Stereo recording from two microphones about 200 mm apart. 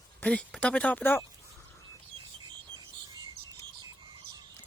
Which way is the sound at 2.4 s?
20° right (ahead or behind).